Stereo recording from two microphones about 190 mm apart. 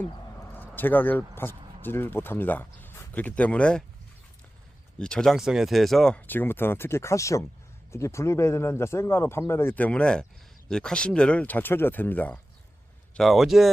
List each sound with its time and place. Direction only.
0.5 s speech: 10° left (ahead or behind)
4.9 s speech: 5° left (ahead or behind)